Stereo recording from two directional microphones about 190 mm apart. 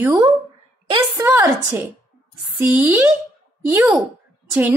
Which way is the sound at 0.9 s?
20° right (ahead or behind).